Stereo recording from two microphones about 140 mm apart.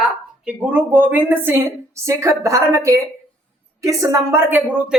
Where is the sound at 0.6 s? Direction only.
10° right (ahead or behind).